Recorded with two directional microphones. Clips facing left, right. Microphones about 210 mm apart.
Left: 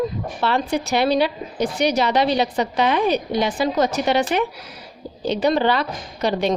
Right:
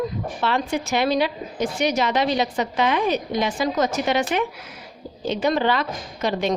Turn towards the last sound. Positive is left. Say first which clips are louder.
# left 2 dB
turn(degrees=35)  # may be behind; listen again after turning